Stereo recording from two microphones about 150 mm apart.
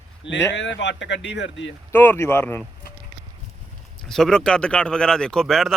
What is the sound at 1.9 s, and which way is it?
Speech, 15° left (ahead or behind).